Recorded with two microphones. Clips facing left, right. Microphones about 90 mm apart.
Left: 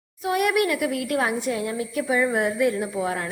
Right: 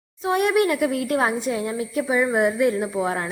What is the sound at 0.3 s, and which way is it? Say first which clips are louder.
A woman's voice: right 2 dB; 30° right (ahead or behind).